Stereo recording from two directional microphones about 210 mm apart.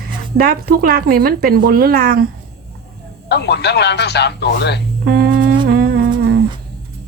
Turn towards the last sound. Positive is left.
turn(degrees=-50)  # may be behind; listen again after turning